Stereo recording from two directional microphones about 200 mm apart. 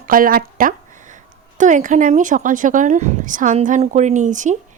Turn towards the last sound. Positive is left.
turn(degrees=-40)  # may be behind; listen again after turning